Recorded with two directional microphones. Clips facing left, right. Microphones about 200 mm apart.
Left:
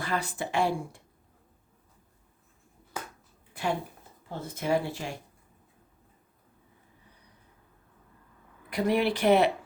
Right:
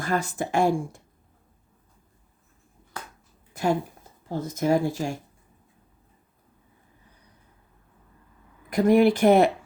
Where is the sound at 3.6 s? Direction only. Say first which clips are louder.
Right 6 dB; 45° right (ahead or behind).